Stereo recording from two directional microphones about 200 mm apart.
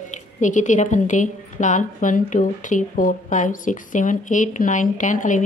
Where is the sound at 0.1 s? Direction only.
40° left (ahead or behind).